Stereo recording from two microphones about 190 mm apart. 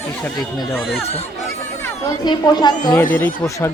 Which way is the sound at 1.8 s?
20° left (ahead or behind).